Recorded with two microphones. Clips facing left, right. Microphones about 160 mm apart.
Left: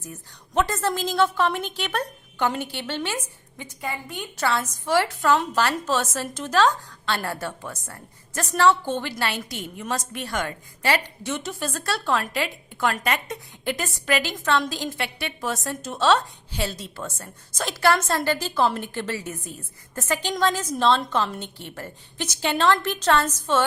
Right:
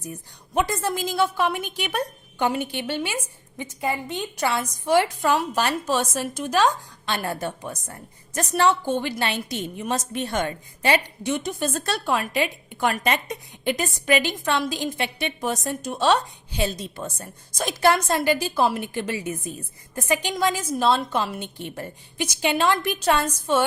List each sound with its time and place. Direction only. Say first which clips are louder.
0.5 s a woman's voice: even; 10° right (ahead or behind)